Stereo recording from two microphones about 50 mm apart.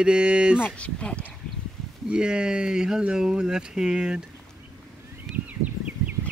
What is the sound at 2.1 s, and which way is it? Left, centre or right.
Speech, centre.